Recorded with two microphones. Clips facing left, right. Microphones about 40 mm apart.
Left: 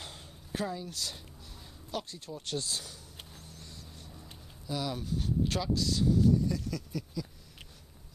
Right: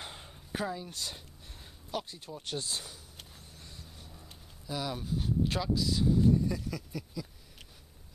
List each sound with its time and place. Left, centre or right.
0.0 s a sound: centre
1.9 s speech: centre
3.3 s a sound: centre
5.5 s speech: centre
6.1 s speech: right
6.5 s speech: centre